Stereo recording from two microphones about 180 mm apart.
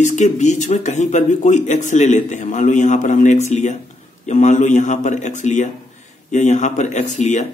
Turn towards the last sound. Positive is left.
turn(degrees=40)  # may be behind; listen again after turning